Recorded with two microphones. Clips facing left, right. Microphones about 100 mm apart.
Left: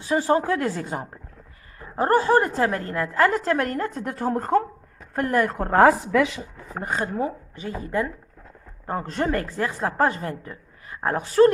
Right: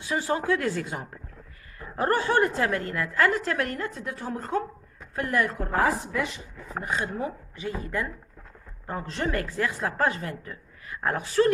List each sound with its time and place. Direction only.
0.0 s a woman's voice: 35° left (ahead or behind)
5.8 s a woman's voice: 90° left
6.8 s a woman's voice: 40° left (ahead or behind); by 8.1 s 25° left (ahead or behind)
8.9 s a woman's voice: 45° left (ahead or behind)